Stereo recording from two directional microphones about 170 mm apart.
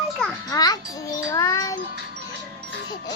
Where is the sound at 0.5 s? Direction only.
20° left (ahead or behind).